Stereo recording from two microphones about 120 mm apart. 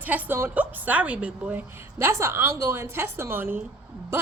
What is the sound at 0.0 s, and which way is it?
A woman's voice, 15° right (ahead or behind).